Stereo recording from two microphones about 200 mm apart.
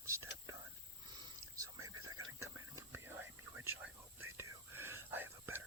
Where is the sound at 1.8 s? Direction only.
90° right.